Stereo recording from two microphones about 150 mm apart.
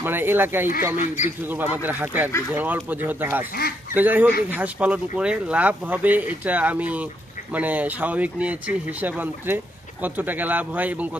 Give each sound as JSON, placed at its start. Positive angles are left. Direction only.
{"t": 0.0, "sound": "speech", "side_deg": -15}
{"t": 0.9, "sound": "a man's voice", "side_deg": 55}
{"t": 1.5, "sound": "speech", "side_deg": -10}